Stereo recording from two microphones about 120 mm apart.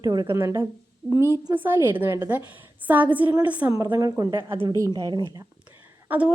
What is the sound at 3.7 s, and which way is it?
A woman's voice, 30° right (ahead or behind).